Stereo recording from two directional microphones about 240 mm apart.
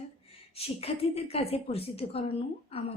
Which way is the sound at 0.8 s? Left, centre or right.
Left.